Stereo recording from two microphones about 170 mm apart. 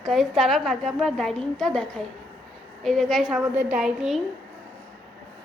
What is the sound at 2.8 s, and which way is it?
Speech, centre (ahead or behind).